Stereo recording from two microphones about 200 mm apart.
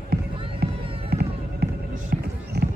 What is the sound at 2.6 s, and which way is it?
Run, 55° right (ahead or behind).